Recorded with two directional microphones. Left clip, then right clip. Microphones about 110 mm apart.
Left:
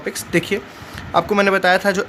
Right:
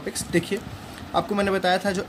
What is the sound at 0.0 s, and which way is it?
Speech, 55° left (ahead or behind).